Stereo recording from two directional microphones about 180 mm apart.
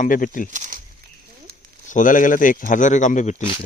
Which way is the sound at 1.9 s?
45° left (ahead or behind).